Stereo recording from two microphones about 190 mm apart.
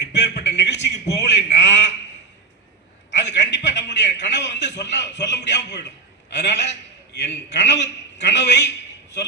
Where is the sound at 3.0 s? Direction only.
70° left (ahead or behind).